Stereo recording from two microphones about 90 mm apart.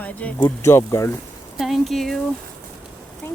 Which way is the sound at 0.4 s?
30° left (ahead or behind).